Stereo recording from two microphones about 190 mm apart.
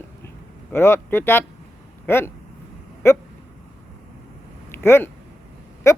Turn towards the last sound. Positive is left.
turn(degrees=15)  # may be behind; listen again after turning